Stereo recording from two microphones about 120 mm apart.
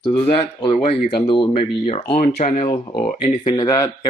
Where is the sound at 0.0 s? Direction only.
45° left (ahead or behind).